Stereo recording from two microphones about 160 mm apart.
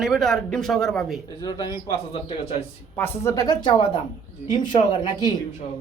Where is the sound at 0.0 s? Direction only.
Centre (ahead or behind).